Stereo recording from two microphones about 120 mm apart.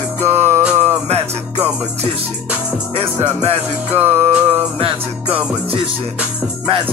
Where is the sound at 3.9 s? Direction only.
15° right (ahead or behind).